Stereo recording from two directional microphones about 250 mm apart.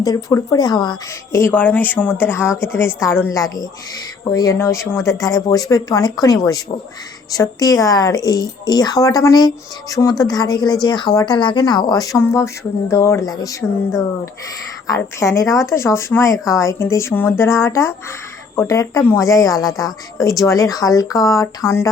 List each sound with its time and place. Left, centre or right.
0.0 s a woman's voice: centre
4.3 s a woman's voice: centre